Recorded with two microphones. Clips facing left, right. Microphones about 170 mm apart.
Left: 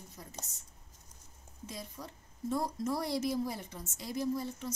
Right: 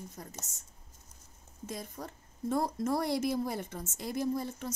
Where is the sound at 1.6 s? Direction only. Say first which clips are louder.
Right 4 dB; 50° right (ahead or behind).